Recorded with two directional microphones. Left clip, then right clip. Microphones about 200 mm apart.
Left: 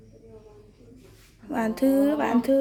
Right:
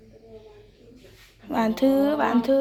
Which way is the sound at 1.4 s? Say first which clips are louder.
Right 2 dB; 15° left (ahead or behind).